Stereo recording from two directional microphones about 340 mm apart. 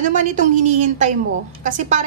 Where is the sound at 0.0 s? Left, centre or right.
Right.